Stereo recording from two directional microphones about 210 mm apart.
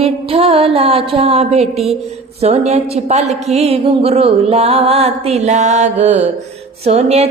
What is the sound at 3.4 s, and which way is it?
Music, 30° right (ahead or behind).